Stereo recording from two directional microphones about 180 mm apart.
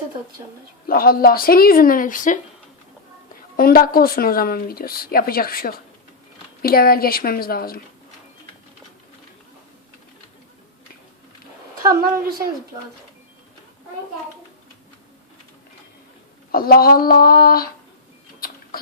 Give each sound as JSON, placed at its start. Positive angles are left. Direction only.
{"t": 0.9, "sound": "speech", "side_deg": 55}
{"t": 3.6, "sound": "speech", "side_deg": 55}
{"t": 11.8, "sound": "a woman's voice", "side_deg": -15}
{"t": 16.5, "sound": "speech", "side_deg": 55}
{"t": 18.3, "sound": "a sound", "side_deg": 55}